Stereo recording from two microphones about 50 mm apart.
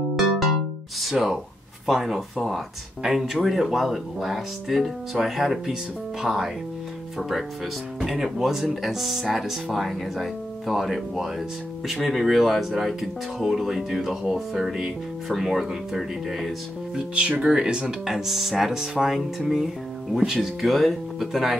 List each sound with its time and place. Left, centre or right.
1.1 s speech: centre
16.9 s speech: right; by 21.5 s centre